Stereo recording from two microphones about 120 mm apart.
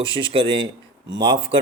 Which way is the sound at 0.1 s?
45° right (ahead or behind).